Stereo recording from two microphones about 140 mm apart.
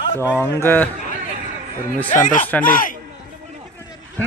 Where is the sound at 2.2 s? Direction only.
70° left (ahead or behind).